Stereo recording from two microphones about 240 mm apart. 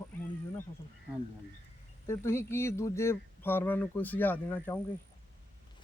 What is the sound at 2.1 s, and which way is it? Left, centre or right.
Speech, centre.